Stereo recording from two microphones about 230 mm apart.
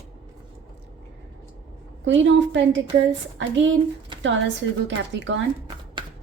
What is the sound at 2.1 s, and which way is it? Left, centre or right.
Speech, right.